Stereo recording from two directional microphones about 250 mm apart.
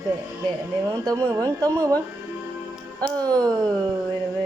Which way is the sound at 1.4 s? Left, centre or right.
Centre.